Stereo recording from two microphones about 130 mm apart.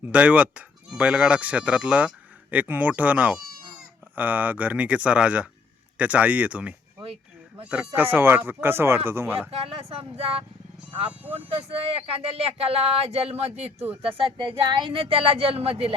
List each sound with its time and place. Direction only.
0.0 s speech: 10° right (ahead or behind)
9.5 s speech: 50° right (ahead or behind)
14.2 s speech: 40° right (ahead or behind)